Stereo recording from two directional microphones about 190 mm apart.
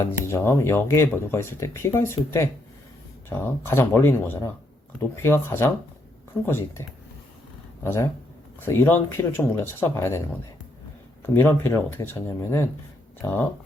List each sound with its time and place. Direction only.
0.1 s speech: 15° left (ahead or behind)
7.9 s speech: 15° left (ahead or behind)
11.3 s speech: 10° left (ahead or behind)